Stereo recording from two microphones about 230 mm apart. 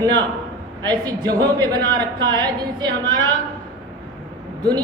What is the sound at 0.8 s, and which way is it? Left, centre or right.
A man's voice, centre.